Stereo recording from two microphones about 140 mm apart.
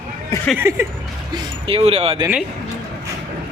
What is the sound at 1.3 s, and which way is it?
Speech, 35° right (ahead or behind).